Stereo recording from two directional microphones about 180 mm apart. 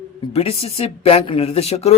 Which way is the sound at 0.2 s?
35° left (ahead or behind).